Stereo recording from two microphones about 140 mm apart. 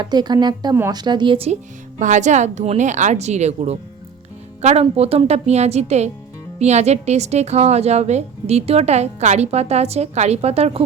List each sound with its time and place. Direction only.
0.0 s speech: 30° right (ahead or behind)
2.0 s a woman's voice: 60° right (ahead or behind); by 10.8 s 45° right (ahead or behind)